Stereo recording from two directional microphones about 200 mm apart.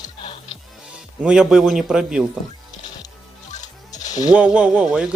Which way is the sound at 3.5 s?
35° left (ahead or behind).